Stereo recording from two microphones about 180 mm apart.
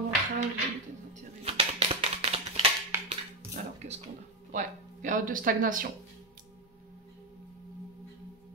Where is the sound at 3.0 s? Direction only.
40° right (ahead or behind).